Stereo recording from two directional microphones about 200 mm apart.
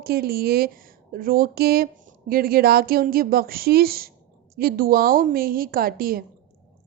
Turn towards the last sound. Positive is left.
turn(degrees=-45)  # may be behind; listen again after turning